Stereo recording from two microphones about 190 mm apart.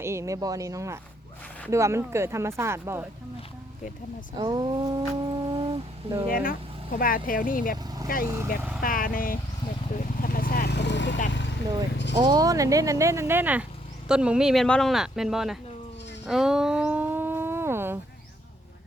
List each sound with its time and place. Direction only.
0.0 s speech: 15° right (ahead or behind)
4.4 s speech: 25° right (ahead or behind)
6.2 s speech: 50° left (ahead or behind)
10.0 s vehicle: 50° left (ahead or behind); by 11.5 s 65° left (ahead or behind)
12.2 s speech: 20° right (ahead or behind); by 15.5 s centre (ahead or behind)
16.2 s a sound: 5° right (ahead or behind)